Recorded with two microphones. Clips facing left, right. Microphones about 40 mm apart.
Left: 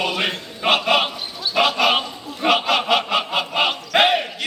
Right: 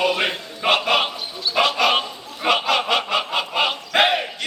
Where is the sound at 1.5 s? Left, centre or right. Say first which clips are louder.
Left 1 dB; centre.